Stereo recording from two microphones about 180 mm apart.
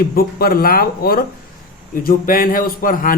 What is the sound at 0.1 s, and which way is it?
A man's voice, 55° left (ahead or behind).